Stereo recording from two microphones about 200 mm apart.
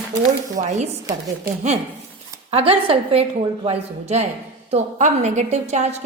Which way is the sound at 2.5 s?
30° right (ahead or behind).